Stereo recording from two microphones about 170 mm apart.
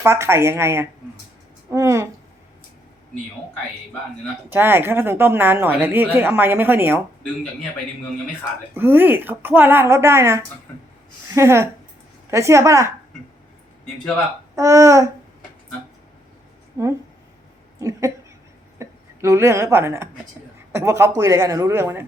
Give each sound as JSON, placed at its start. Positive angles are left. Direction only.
{"t": 0.0, "sound": "speech", "side_deg": -15}
{"t": 4.4, "sound": "speech", "side_deg": -15}
{"t": 8.7, "sound": "speech", "side_deg": -10}
{"t": 14.5, "sound": "speech", "side_deg": -20}
{"t": 16.8, "sound": "speech", "side_deg": -15}